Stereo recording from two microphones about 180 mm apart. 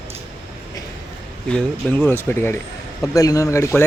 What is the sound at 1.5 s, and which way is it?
A man's voice, 10° left (ahead or behind).